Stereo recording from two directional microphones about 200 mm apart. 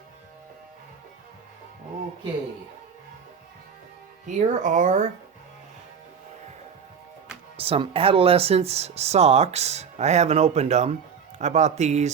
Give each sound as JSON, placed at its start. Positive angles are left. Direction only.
{"t": 4.3, "sound": "speech", "side_deg": -40}
{"t": 7.5, "sound": "speech", "side_deg": -30}